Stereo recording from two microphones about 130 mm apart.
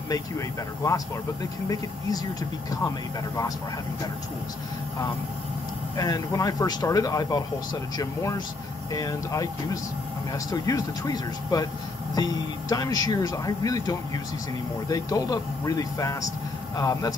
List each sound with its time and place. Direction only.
0.8 s speech: 25° left (ahead or behind)
5.9 s speech: 25° left (ahead or behind)